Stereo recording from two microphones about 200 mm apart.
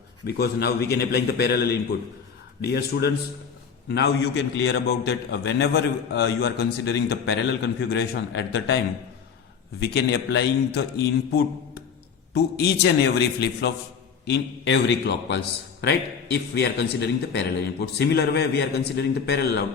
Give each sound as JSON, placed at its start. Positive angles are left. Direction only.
{"t": 0.3, "sound": "a man's voice", "side_deg": 50}
{"t": 9.8, "sound": "a man's voice", "side_deg": 55}